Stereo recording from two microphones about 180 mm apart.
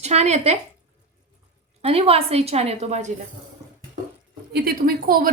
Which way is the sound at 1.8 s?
35° right (ahead or behind).